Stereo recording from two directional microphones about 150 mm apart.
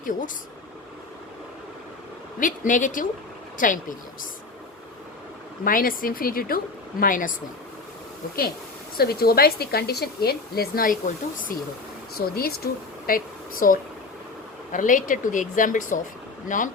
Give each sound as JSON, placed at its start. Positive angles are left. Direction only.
{"t": 2.4, "sound": "speech", "side_deg": 60}
{"t": 5.6, "sound": "speech", "side_deg": 70}
{"t": 7.0, "sound": "speech", "side_deg": 65}
{"t": 9.0, "sound": "a woman's voice", "side_deg": 90}
{"t": 12.1, "sound": "speech", "side_deg": 90}
{"t": 14.7, "sound": "speech", "side_deg": 60}